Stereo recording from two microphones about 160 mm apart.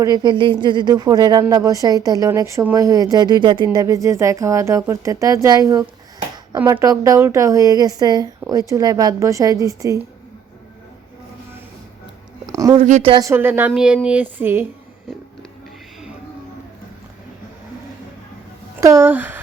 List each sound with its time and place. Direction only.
0.0 s a woman's voice: 25° right (ahead or behind)
12.5 s a sound: 20° right (ahead or behind)
12.8 s speech: 40° right (ahead or behind)
13.2 s a woman's voice: 15° right (ahead or behind)
18.8 s speech: 15° right (ahead or behind)